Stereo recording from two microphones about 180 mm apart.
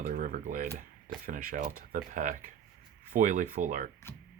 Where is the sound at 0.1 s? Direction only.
50° right (ahead or behind).